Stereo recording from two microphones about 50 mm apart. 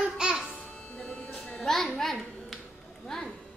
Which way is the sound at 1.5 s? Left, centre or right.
Centre.